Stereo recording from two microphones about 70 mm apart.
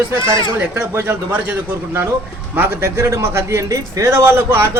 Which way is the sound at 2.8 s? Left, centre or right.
Right.